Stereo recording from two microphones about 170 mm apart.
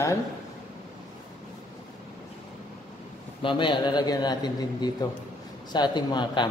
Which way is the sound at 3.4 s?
30° left (ahead or behind).